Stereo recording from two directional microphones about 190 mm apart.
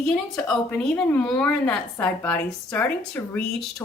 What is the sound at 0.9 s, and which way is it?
A woman's voice, 10° left (ahead or behind).